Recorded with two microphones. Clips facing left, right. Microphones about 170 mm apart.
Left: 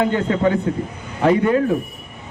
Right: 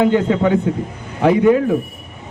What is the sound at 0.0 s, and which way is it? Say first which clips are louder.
Speech: right 3 dB; 10° right (ahead or behind).